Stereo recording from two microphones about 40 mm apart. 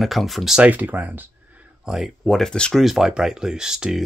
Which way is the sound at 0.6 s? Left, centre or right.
Right.